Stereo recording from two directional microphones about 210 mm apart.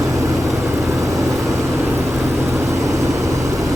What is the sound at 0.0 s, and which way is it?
Vehicle, 15° right (ahead or behind).